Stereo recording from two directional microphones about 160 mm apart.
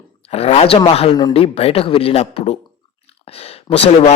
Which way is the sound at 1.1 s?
25° left (ahead or behind).